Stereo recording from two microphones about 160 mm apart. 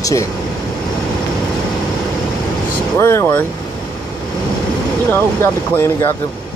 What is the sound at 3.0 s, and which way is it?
Speech, 15° left (ahead or behind).